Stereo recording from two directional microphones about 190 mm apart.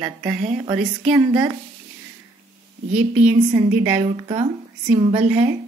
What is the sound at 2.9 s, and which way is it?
A woman's voice, 40° right (ahead or behind).